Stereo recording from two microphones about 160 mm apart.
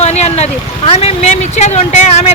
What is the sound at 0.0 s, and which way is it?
Speech, 45° left (ahead or behind).